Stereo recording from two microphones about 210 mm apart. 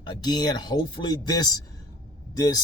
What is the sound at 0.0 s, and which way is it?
Speech, 20° left (ahead or behind).